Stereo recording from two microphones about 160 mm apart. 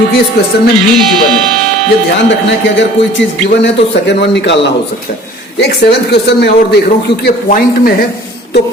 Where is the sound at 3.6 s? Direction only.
90° left.